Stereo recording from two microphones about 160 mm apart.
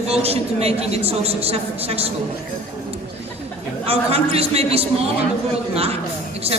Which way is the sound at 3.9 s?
40° right (ahead or behind).